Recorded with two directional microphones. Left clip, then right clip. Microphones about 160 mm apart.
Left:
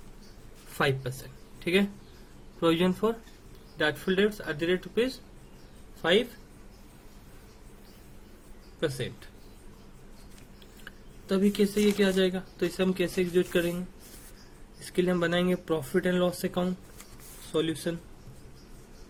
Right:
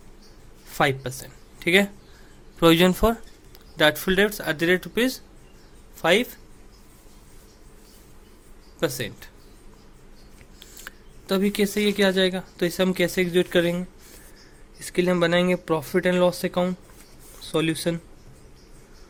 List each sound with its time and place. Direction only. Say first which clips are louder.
0.8 s speech: right 6 dB; 30° right (ahead or behind)
1.5 s a sound: right 7 dB; 30° right (ahead or behind)
2.6 s speech: right 8 dB; 35° right (ahead or behind)
8.8 s speech: right 5 dB; 40° right (ahead or behind)
10.6 s speech: right 7 dB; 30° right (ahead or behind)
14.8 s speech: right 6 dB; 25° right (ahead or behind)